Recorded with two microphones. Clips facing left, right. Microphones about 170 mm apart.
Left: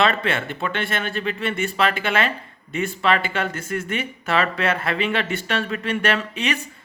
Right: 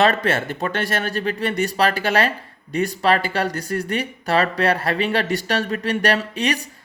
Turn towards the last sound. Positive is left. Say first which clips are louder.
# right 3 dB
turn(degrees=-40)  # may be behind; listen again after turning